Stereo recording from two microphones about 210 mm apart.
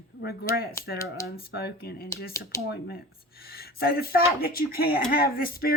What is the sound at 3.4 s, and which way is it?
Speech, 45° left (ahead or behind).